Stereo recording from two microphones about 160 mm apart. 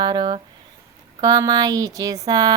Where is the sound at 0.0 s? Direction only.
25° right (ahead or behind).